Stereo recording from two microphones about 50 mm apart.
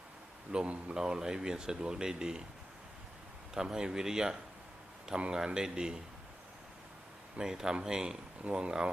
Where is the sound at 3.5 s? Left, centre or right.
Centre.